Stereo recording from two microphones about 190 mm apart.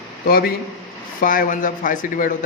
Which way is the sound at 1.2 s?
45° left (ahead or behind).